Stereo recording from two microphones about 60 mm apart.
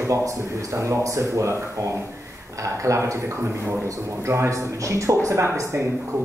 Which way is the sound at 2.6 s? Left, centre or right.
Right.